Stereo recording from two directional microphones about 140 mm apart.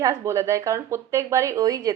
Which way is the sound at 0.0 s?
20° right (ahead or behind).